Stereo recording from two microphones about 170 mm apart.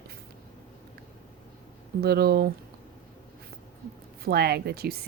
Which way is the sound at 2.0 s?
65° right (ahead or behind).